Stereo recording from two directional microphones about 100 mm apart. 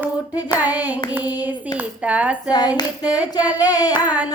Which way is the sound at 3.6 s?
40° left (ahead or behind).